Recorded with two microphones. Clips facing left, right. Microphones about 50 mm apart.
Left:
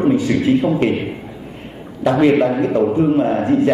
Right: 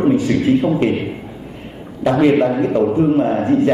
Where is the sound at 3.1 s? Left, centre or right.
Left.